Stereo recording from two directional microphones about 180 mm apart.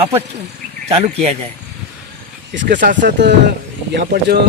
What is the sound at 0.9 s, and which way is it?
Speech, 35° right (ahead or behind).